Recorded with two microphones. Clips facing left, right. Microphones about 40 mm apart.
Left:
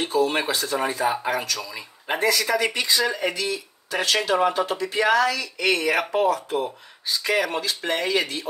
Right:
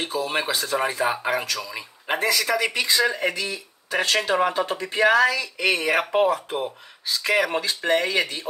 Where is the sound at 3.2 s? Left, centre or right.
Right.